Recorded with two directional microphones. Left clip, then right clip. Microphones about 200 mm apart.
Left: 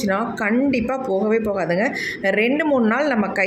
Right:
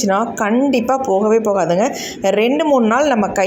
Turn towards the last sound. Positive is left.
turn(degrees=-20)  # may be behind; listen again after turning